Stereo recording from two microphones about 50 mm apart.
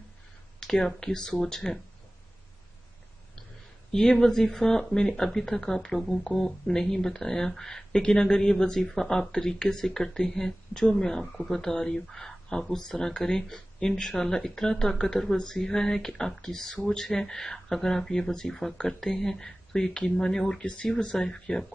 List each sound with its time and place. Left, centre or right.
0.8 s speech: centre
3.9 s speech: centre
20.6 s speech: left
20.9 s speech: centre